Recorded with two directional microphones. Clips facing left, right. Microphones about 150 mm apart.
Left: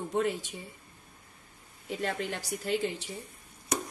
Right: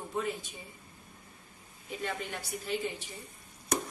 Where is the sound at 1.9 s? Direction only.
90° left.